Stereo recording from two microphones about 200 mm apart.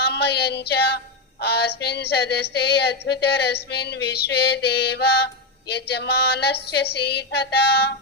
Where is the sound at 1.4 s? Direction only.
55° left (ahead or behind).